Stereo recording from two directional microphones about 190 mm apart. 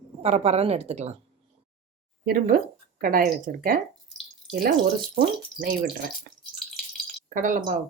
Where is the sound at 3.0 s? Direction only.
50° right (ahead or behind).